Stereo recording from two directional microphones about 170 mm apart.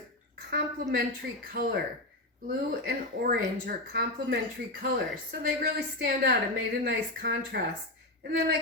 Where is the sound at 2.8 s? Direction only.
60° right (ahead or behind).